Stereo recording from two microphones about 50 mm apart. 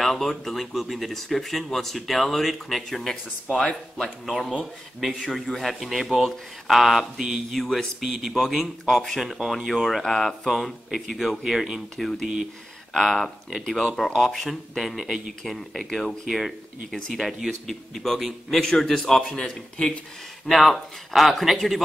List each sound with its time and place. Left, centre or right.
0.0 s speech: centre
5.0 s speech: centre
12.0 s speech: centre
16.3 s speech: centre
20.4 s speech: centre